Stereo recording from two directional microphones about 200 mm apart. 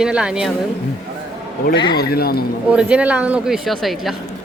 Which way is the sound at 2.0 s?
50° left (ahead or behind).